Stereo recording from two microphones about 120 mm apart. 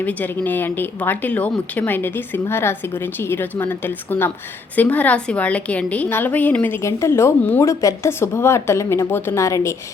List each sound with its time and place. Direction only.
0.0 s a woman's voice: 15° left (ahead or behind)